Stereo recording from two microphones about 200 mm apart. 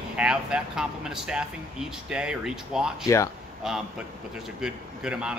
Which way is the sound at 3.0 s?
15° left (ahead or behind).